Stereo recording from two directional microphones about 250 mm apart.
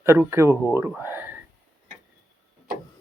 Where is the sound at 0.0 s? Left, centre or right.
Centre.